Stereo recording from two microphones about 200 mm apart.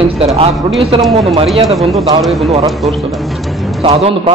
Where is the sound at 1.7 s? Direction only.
Centre (ahead or behind).